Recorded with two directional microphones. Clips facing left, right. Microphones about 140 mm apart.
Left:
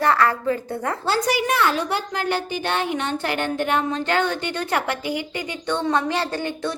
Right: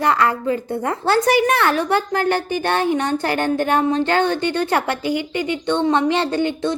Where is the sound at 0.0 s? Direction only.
20° right (ahead or behind).